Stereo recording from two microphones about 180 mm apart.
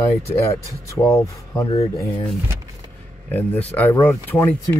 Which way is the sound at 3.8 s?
10° left (ahead or behind).